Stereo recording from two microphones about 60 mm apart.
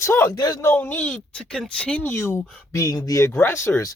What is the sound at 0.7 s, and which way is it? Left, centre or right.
Speech, left.